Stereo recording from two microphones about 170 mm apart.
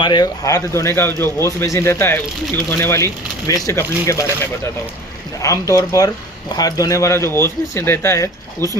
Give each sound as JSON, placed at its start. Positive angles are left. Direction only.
{"t": 0.0, "sound": "speech", "side_deg": 25}